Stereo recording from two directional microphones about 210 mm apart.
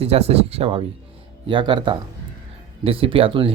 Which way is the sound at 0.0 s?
30° right (ahead or behind).